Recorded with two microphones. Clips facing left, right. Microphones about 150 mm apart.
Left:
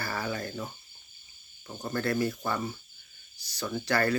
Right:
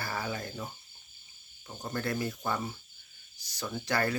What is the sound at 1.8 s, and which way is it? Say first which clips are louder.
Speech: left 4 dB; 15° right (ahead or behind).